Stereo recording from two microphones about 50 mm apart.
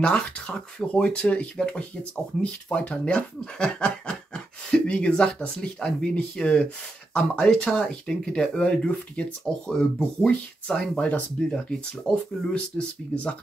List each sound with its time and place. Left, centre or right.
0.0 s speech: centre